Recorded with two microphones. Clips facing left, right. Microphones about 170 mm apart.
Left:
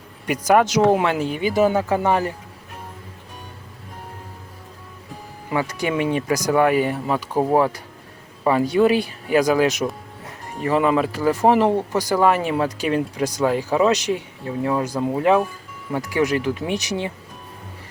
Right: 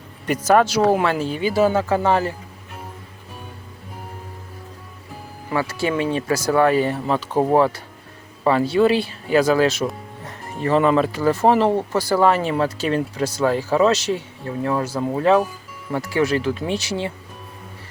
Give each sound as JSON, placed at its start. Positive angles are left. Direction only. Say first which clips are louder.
{"t": 0.3, "sound": "speech", "louder": "right 1 dB", "side_deg": 15}
{"t": 5.5, "sound": "speech", "louder": "right 1 dB", "side_deg": 15}
{"t": 10.2, "sound": "music", "louder": "right 1 dB", "side_deg": 10}
{"t": 11.2, "sound": "speech", "louder": "left 2 dB", "side_deg": 10}